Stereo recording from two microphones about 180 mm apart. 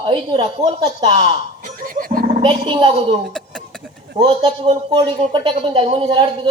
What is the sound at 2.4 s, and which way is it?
Speech, 25° right (ahead or behind).